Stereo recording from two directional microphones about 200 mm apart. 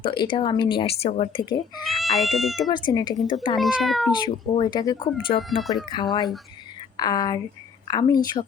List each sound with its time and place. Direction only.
0.0 s speech: 25° left (ahead or behind)
2.0 s speech: centre (ahead or behind)
2.6 s speech: 25° left (ahead or behind)
3.6 s speech: centre (ahead or behind)
4.2 s speech: 20° left (ahead or behind)
5.4 s speech: centre (ahead or behind)
5.7 s speech: 20° left (ahead or behind)